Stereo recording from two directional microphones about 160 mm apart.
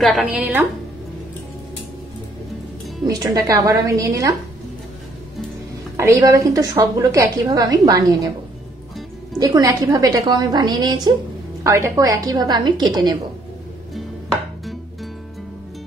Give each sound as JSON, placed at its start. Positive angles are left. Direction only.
{"t": 0.0, "sound": "a woman's voice", "side_deg": -5}
{"t": 3.1, "sound": "a woman's voice", "side_deg": -20}
{"t": 5.9, "sound": "a woman's voice", "side_deg": -20}
{"t": 9.4, "sound": "a woman's voice", "side_deg": -25}
{"t": 13.9, "sound": "music", "side_deg": 0}